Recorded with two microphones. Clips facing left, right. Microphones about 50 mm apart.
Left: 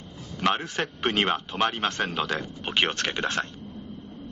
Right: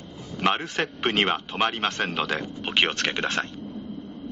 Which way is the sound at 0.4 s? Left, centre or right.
Centre.